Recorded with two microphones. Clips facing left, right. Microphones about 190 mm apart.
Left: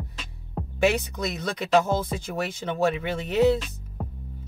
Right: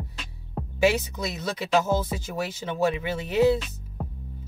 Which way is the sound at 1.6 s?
5° right (ahead or behind).